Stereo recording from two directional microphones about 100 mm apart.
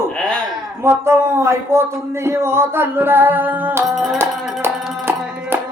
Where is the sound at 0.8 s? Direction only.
25° right (ahead or behind).